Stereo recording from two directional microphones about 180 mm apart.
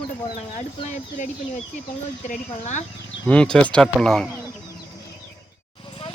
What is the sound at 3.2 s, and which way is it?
Speech, 5° left (ahead or behind).